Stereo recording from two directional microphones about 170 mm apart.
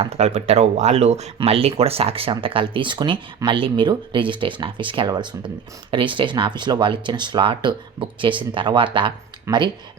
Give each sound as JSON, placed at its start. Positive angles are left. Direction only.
{"t": 0.0, "sound": "speech", "side_deg": -40}